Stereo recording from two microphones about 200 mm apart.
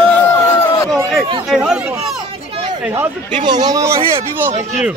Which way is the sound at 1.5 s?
5° right (ahead or behind).